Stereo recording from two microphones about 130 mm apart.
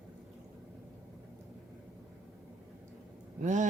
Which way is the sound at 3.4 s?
70° right (ahead or behind).